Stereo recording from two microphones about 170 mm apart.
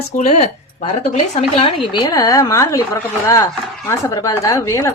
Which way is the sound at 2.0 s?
20° left (ahead or behind).